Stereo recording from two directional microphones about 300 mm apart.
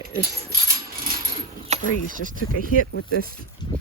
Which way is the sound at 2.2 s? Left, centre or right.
Right.